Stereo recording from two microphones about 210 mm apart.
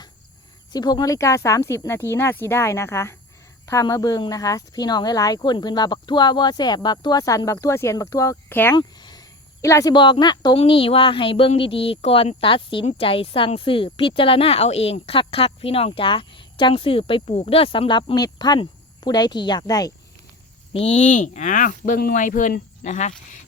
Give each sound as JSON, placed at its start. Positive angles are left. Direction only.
{"t": 0.7, "sound": "speech", "side_deg": 20}
{"t": 20.7, "sound": "speech", "side_deg": 30}